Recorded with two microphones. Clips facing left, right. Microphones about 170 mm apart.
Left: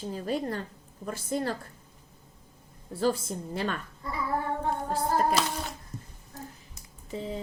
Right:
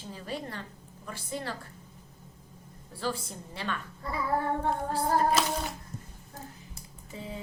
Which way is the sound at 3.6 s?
40° left (ahead or behind).